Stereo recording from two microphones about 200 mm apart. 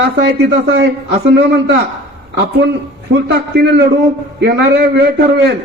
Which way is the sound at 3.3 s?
55° right (ahead or behind).